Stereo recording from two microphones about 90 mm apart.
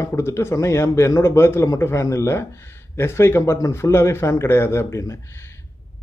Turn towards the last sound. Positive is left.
turn(degrees=35)  # may be behind; listen again after turning